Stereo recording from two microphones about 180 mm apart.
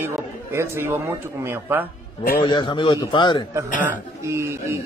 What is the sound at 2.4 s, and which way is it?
Speech, 25° left (ahead or behind).